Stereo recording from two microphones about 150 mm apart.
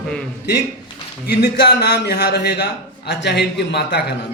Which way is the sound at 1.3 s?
90° left.